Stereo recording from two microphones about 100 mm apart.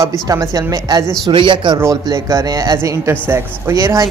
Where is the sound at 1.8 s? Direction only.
35° right (ahead or behind).